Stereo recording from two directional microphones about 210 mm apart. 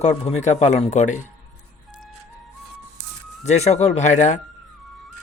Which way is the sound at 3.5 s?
30° left (ahead or behind).